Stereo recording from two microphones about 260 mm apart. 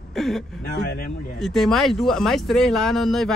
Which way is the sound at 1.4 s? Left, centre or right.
Centre.